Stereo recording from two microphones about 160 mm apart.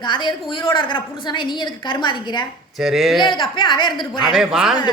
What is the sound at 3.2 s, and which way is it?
Speech, 30° left (ahead or behind).